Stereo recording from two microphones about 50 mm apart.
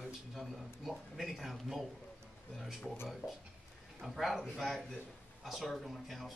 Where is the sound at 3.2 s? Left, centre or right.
Left.